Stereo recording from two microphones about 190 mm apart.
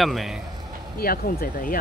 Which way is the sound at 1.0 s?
50° left (ahead or behind).